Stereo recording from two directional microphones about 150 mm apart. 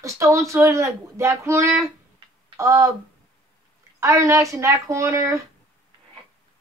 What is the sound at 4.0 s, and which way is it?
A woman's voice, 20° right (ahead or behind).